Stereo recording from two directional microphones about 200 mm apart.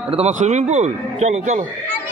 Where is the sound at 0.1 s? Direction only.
35° right (ahead or behind).